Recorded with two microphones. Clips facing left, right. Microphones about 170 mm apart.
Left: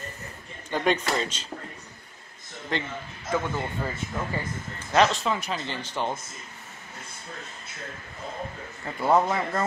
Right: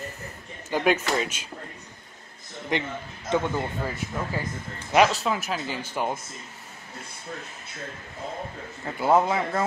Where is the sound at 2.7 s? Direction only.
20° right (ahead or behind).